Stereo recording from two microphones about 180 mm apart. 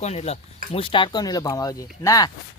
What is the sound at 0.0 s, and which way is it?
Speech, 35° left (ahead or behind).